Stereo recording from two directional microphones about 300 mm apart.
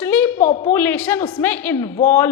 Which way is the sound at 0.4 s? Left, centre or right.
Left.